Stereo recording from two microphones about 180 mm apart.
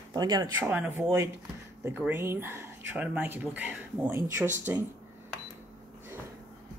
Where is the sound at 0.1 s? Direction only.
20° right (ahead or behind).